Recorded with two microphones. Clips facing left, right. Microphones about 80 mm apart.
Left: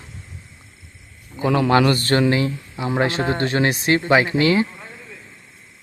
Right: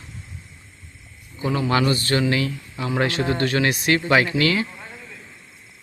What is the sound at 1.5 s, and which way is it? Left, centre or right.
Speech, left.